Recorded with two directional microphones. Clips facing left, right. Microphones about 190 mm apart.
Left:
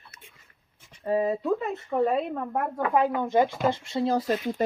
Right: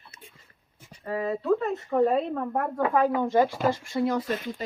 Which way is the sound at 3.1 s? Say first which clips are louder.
Right 2 dB; 10° right (ahead or behind).